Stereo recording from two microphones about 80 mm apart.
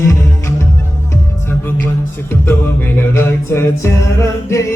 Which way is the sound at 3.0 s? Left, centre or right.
Left.